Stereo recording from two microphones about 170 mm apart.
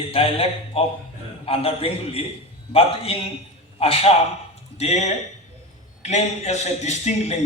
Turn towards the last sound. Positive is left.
turn(degrees=40)  # may be behind; listen again after turning